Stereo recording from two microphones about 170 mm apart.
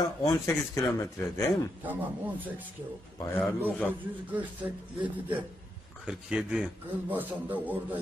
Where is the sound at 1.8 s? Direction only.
10° right (ahead or behind).